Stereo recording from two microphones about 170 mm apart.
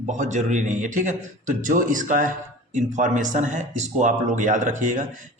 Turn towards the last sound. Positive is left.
turn(degrees=-50)  # may be behind; listen again after turning